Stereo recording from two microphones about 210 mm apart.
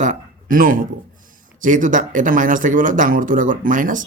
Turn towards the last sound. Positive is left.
turn(degrees=-40)  # may be behind; listen again after turning